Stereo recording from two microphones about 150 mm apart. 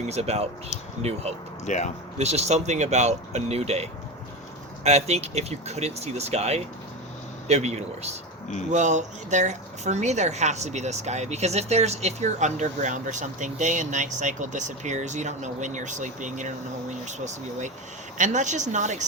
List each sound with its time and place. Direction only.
0.1 s speech: 45° right (ahead or behind)
1.6 s speech: 50° left (ahead or behind)
2.1 s a woman's voice: 45° right (ahead or behind)